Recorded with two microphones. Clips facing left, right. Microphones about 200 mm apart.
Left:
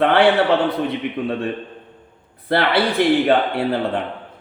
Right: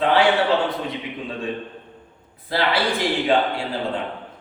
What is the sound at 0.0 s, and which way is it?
Speech, 60° left (ahead or behind).